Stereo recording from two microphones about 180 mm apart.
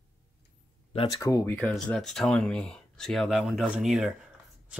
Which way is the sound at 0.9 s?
30° left (ahead or behind).